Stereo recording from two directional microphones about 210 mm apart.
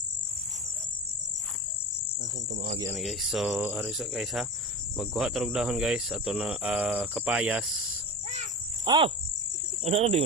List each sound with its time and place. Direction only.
2.9 s speech: centre (ahead or behind)
8.8 s speech: 25° right (ahead or behind)